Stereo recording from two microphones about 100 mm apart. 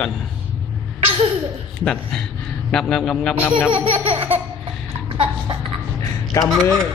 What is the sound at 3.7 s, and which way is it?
Laughter, 65° right (ahead or behind).